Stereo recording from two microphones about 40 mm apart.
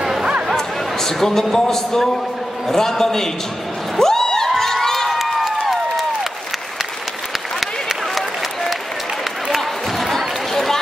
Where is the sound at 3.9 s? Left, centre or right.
Centre.